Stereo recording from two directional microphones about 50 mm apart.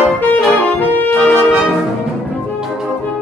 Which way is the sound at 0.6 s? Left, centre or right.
Left.